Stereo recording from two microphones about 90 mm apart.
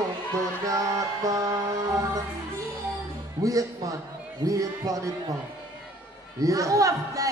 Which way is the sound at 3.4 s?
40° right (ahead or behind).